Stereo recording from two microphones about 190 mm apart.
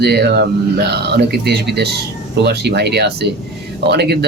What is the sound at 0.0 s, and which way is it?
Speech, 60° right (ahead or behind).